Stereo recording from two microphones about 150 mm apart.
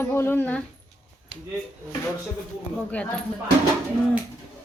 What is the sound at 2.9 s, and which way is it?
Speech, 5° left (ahead or behind).